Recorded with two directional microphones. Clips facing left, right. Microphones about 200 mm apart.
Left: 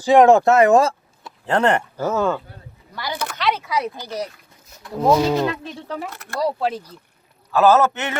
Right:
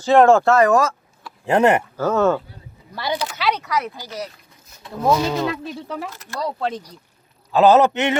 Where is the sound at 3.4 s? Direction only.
Centre (ahead or behind).